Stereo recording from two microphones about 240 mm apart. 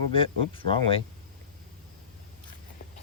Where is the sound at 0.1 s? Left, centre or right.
Left.